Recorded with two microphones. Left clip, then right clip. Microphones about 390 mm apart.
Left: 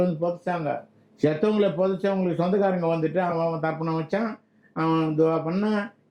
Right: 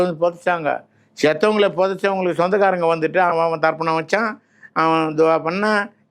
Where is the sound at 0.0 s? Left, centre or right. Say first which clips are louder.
Right 7 dB; centre.